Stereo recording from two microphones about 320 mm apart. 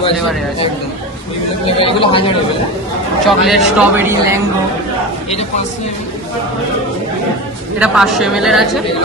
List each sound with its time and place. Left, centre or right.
1.6 s speech: centre
3.2 s speech: centre
7.8 s speech: centre